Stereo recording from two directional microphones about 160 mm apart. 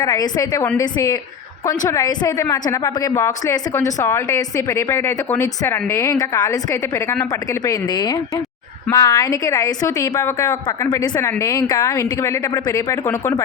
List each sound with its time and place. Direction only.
0.0 s a woman's voice: 25° left (ahead or behind)